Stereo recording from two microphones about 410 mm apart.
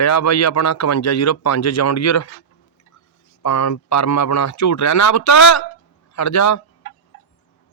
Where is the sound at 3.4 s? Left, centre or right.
Left.